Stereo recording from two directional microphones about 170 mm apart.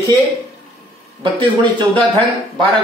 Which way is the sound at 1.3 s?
30° right (ahead or behind).